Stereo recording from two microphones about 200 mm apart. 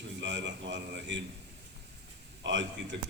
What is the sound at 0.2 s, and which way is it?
A man's voice, 65° right (ahead or behind).